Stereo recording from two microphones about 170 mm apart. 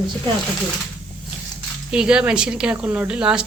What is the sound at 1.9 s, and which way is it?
Speech, 5° right (ahead or behind).